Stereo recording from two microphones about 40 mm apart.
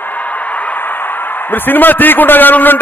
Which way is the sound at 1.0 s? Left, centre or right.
Left.